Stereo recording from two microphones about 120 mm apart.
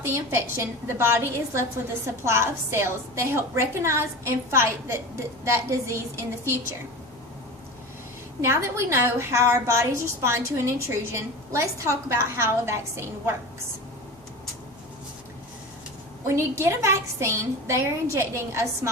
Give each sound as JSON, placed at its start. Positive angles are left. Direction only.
{"t": 0.0, "sound": "a woman's voice", "side_deg": -20}
{"t": 8.4, "sound": "a woman's voice", "side_deg": -25}
{"t": 16.2, "sound": "a woman's voice", "side_deg": -20}